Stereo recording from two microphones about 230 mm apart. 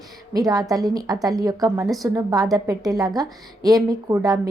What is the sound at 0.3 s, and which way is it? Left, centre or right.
A woman's voice, centre.